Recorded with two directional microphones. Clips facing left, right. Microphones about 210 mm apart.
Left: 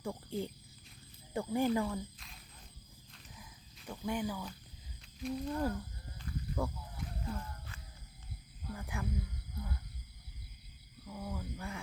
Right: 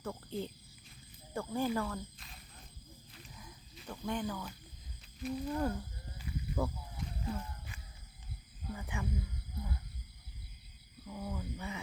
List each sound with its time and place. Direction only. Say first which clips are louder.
0.0 s speech: left 1 dB; 15° left (ahead or behind)
2.0 s speech: left 2 dB; centre (ahead or behind)
3.1 s a sound: right 1 dB; centre (ahead or behind)
5.2 s speech: even; centre (ahead or behind)
6.1 s snake: right 1 dB; 5° right (ahead or behind)
7.3 s a sound: right 3 dB; 10° right (ahead or behind)
8.7 s speech: even; centre (ahead or behind)
11.0 s speech: right 1 dB; centre (ahead or behind)